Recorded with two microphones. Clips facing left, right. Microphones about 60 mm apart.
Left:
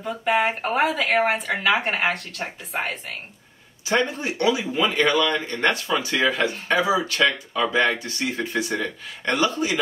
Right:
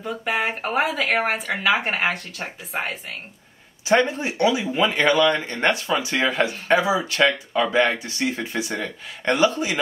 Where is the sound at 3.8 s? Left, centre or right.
Right.